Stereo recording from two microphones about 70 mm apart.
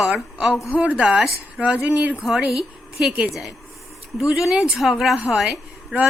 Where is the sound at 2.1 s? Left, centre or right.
Centre.